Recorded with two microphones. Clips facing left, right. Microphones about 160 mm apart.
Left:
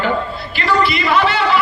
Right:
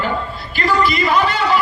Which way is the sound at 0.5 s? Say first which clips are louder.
Even; 45° right (ahead or behind).